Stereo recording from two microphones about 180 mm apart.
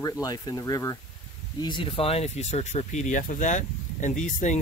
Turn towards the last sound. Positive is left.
turn(degrees=45)  # may be behind; listen again after turning